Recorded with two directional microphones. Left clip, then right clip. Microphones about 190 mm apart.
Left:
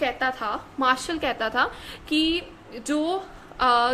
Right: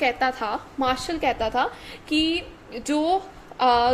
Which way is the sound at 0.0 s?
20° right (ahead or behind).